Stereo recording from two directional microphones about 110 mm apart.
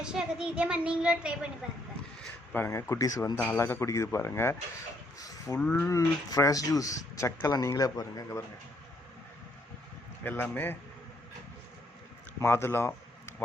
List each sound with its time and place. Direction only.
0.0 s a woman's voice: 5° right (ahead or behind)
2.2 s a sound: 15° left (ahead or behind)
2.6 s a man's voice: 25° left (ahead or behind)
3.3 s a man's voice: 15° left (ahead or behind)
5.7 s speech: 25° left (ahead or behind)
10.2 s a man's voice: 15° left (ahead or behind)
12.4 s speech: 25° left (ahead or behind)